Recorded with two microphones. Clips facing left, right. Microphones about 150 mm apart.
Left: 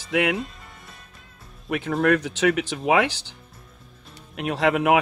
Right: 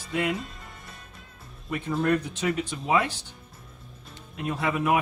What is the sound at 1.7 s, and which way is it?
Speech, 85° left.